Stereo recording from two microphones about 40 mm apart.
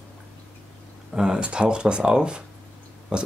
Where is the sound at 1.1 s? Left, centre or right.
Right.